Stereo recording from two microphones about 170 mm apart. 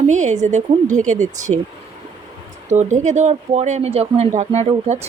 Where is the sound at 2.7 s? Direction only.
45° right (ahead or behind).